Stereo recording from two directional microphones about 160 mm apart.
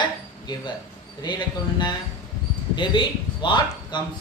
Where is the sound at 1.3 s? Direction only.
25° left (ahead or behind).